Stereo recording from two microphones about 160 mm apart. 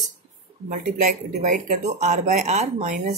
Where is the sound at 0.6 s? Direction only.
55° right (ahead or behind).